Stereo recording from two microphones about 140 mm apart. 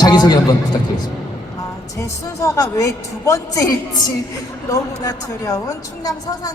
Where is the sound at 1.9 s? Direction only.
20° left (ahead or behind).